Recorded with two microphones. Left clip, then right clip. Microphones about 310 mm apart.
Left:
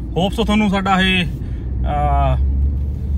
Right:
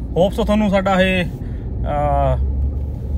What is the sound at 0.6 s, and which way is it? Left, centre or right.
Speech, left.